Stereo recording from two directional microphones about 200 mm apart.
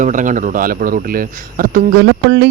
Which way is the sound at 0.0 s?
40° right (ahead or behind).